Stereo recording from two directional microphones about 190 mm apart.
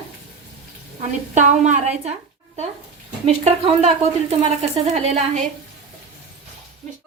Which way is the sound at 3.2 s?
35° right (ahead or behind).